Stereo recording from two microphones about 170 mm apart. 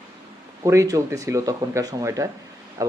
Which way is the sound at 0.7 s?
20° right (ahead or behind).